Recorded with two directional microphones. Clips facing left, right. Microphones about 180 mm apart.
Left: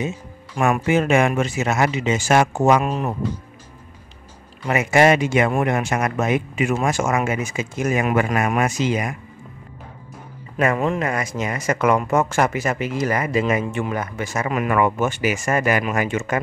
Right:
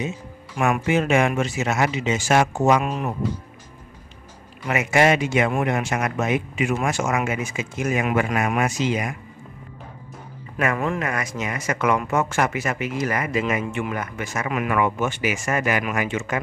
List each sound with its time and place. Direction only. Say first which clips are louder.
0.6 s speech: left 2 dB; 40° left (ahead or behind)
4.6 s speech: left 3 dB; 35° left (ahead or behind)
10.6 s speech: left 3 dB; 25° left (ahead or behind); by 16.3 s 45° left (ahead or behind)